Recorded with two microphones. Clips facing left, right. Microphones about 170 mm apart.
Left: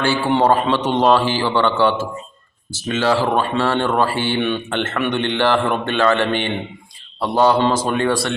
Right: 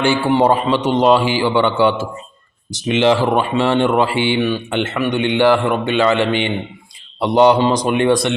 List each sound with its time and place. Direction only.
0.0 s speech: 15° right (ahead or behind)